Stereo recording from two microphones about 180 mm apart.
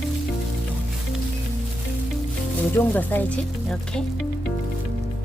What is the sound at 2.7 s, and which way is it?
A woman's voice, 10° left (ahead or behind).